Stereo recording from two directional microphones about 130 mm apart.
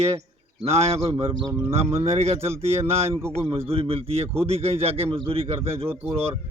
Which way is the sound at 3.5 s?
50° right (ahead or behind).